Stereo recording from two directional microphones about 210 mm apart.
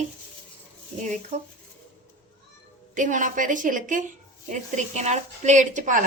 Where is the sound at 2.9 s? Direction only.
35° right (ahead or behind).